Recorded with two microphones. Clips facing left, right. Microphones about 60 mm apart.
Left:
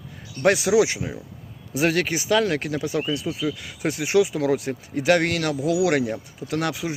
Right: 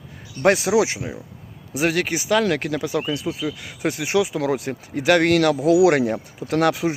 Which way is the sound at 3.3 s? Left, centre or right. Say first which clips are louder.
Even; right.